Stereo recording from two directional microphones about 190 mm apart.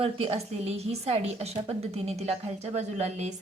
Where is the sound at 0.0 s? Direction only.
30° right (ahead or behind).